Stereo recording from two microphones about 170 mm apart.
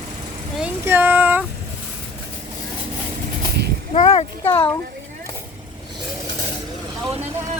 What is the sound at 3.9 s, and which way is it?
Speech, 40° left (ahead or behind).